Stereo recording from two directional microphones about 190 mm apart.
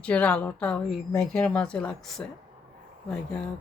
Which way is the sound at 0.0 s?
5° left (ahead or behind).